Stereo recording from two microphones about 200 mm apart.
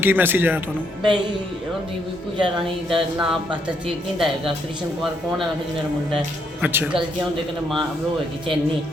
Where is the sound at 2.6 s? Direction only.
Centre (ahead or behind).